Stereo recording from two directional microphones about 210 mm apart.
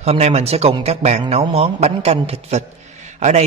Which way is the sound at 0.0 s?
30° right (ahead or behind).